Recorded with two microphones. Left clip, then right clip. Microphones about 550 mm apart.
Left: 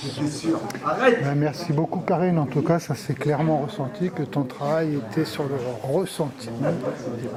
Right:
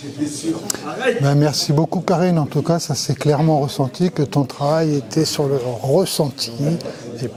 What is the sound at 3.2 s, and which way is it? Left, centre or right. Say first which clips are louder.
Speech: right 6 dB; right.